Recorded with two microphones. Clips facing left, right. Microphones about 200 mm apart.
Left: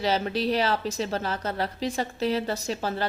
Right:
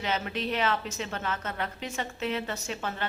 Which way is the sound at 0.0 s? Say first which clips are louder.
Left 6 dB; 35° left (ahead or behind).